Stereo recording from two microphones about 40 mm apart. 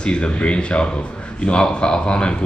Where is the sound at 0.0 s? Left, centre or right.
Left.